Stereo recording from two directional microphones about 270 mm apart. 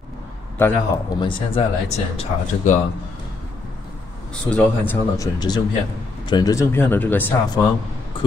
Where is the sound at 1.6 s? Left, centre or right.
Left.